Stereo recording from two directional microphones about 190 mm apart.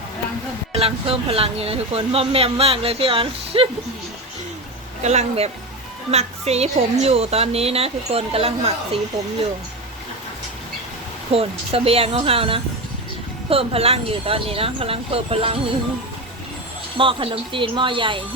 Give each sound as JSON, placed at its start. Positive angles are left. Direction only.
{"t": 0.7, "sound": "speech", "side_deg": -30}
{"t": 5.0, "sound": "speech", "side_deg": -35}
{"t": 11.3, "sound": "speech", "side_deg": -30}
{"t": 17.0, "sound": "speech", "side_deg": -25}